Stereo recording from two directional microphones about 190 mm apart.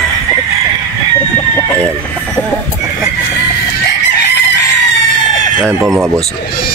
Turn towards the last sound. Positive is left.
turn(degrees=0)  # may be behind; listen again after turning